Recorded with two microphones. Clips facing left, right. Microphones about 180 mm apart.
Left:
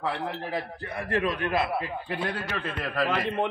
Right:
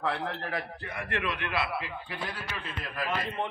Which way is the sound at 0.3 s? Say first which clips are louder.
Left 3 dB; 20° left (ahead or behind).